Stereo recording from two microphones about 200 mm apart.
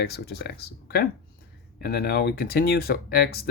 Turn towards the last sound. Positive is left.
turn(degrees=50)  # may be behind; listen again after turning